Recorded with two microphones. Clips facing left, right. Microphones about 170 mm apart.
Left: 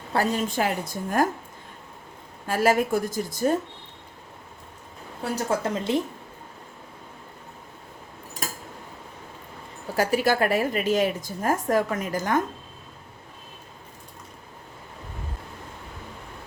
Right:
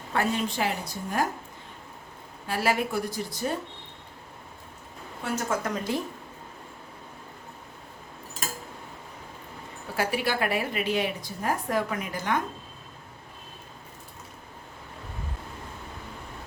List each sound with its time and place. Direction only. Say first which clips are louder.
0.1 s a woman's voice: left 3 dB; 40° left (ahead or behind)
2.5 s a woman's voice: left 5 dB; 45° left (ahead or behind)
5.2 s speech: left 3 dB; 35° left (ahead or behind)
9.9 s a woman's voice: left 5 dB; 40° left (ahead or behind)